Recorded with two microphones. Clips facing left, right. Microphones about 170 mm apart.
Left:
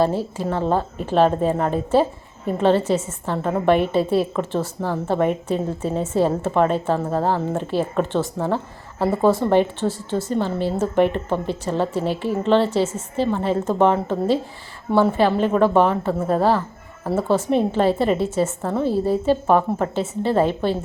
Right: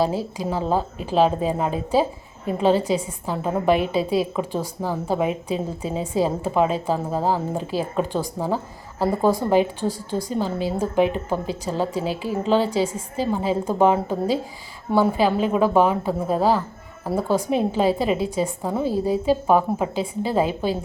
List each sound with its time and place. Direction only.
0.0 s a woman's voice: 10° right (ahead or behind)